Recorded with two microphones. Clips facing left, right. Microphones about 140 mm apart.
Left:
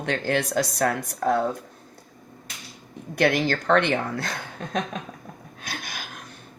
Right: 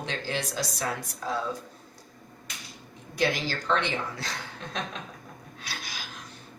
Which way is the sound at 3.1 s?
60° left (ahead or behind).